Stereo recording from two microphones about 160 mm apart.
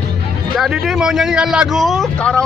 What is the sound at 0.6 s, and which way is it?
Speech, 5° right (ahead or behind).